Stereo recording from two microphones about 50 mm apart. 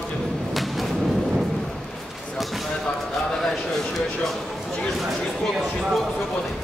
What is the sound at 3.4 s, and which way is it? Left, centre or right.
A man's voice, centre.